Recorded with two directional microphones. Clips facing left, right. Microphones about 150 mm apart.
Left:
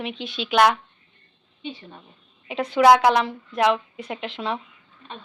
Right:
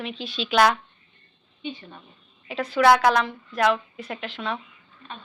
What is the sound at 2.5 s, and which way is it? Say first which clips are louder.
A woman's voice: left 3 dB; 20° left (ahead or behind).